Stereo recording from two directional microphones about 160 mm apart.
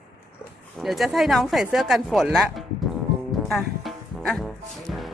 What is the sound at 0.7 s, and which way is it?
Speech, centre (ahead or behind).